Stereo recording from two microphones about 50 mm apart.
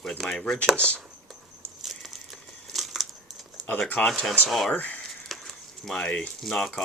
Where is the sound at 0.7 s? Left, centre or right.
Right.